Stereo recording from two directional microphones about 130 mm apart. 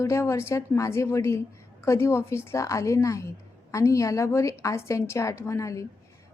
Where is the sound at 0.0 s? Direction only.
20° left (ahead or behind).